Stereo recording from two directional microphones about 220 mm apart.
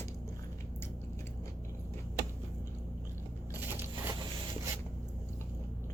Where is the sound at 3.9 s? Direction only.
20° right (ahead or behind).